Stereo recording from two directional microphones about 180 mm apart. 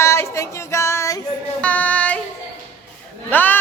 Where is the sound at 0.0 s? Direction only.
15° left (ahead or behind).